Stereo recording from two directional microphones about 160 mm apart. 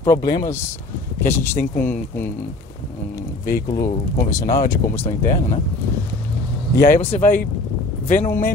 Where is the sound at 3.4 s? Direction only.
65° left (ahead or behind).